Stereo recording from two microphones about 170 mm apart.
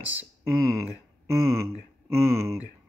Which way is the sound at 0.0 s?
10° right (ahead or behind).